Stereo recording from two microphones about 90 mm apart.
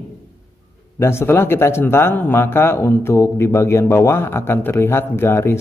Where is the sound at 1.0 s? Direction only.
30° left (ahead or behind).